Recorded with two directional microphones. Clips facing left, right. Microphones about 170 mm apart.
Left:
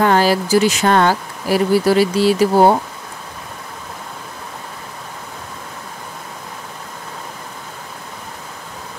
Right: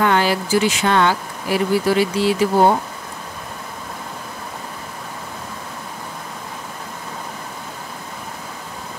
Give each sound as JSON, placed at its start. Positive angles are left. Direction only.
{"t": 0.0, "sound": "speech", "side_deg": 40}